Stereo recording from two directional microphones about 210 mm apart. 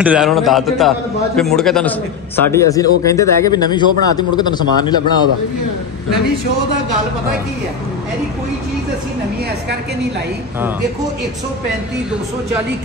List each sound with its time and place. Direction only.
0.0 s a man's voice: 5° right (ahead or behind); by 4.9 s 20° left (ahead or behind)